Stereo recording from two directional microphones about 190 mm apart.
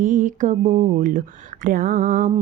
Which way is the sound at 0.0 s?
45° right (ahead or behind).